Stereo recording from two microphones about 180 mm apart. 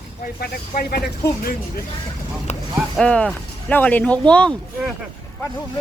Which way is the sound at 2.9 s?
5° left (ahead or behind).